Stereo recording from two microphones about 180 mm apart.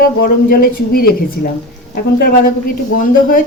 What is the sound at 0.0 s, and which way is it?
A man's voice, 55° left (ahead or behind).